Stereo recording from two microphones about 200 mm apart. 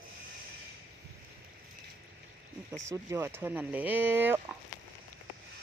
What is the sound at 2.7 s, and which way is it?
Speech, 15° right (ahead or behind).